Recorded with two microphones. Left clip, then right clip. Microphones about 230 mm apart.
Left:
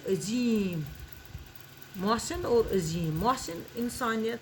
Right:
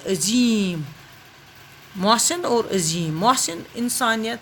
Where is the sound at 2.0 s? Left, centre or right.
Right.